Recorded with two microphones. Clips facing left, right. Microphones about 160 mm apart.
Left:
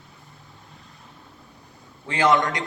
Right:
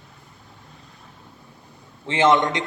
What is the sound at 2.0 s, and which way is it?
Speech, 25° right (ahead or behind).